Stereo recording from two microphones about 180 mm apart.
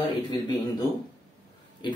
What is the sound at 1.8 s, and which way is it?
Speech, 25° left (ahead or behind).